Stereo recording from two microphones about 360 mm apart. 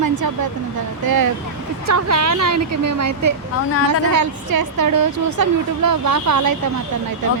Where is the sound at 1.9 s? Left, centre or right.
Right.